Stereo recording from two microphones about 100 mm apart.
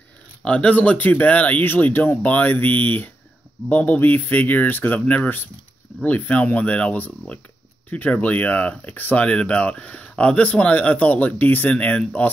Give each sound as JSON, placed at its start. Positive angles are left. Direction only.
{"t": 0.4, "sound": "speech", "side_deg": 10}